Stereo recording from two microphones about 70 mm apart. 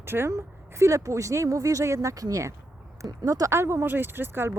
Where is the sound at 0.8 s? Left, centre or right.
Right.